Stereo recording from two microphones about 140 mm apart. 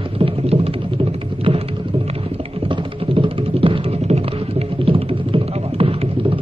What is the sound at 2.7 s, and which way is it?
Music, 40° right (ahead or behind).